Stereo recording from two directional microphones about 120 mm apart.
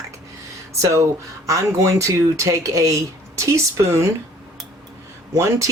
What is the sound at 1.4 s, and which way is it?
Speech, 25° right (ahead or behind).